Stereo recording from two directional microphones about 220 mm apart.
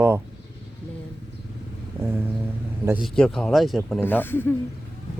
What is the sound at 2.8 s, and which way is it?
Speech, 10° right (ahead or behind).